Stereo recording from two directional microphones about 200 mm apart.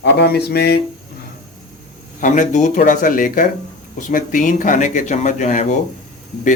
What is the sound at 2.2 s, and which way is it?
Speech, 40° left (ahead or behind).